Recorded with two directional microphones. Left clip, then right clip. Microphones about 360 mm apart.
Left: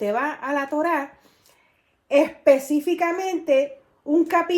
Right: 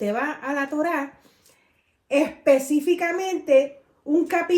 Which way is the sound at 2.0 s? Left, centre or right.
Centre.